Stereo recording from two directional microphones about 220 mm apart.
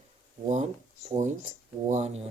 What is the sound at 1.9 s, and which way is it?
Speech, 30° right (ahead or behind).